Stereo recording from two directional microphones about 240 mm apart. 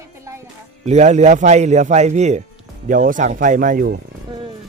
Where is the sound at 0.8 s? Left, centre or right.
Right.